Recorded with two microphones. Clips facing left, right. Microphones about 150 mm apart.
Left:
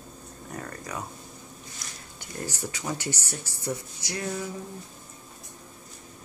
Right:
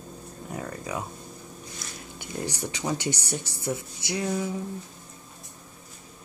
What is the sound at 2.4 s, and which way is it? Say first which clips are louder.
Speech: right 3 dB; 20° right (ahead or behind).